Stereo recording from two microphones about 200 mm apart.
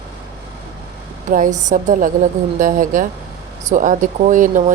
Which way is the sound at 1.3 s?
40° right (ahead or behind).